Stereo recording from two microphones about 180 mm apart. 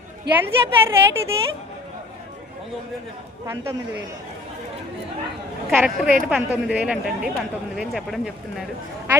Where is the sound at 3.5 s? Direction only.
15° right (ahead or behind).